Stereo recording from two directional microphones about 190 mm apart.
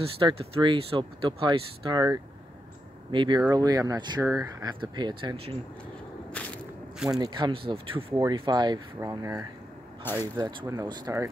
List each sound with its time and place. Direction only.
0.2 s speech: 30° right (ahead or behind)
6.3 s walk: 5° left (ahead or behind)
7.1 s speech: 20° right (ahead or behind)
8.1 s speech: 15° right (ahead or behind)
10.0 s speech: 10° left (ahead or behind)
10.3 s speech: 20° right (ahead or behind)